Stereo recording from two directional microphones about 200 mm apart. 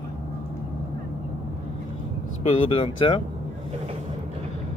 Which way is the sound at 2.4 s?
30° left (ahead or behind).